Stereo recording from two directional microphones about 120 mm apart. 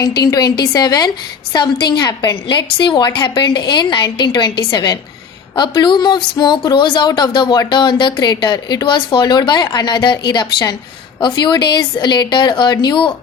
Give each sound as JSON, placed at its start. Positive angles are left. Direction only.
{"t": 0.0, "sound": "speech", "side_deg": 35}